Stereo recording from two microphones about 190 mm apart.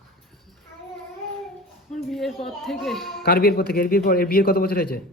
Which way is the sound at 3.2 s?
55° left (ahead or behind).